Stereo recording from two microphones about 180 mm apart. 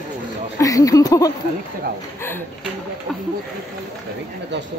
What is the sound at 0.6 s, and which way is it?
Speech, 20° left (ahead or behind).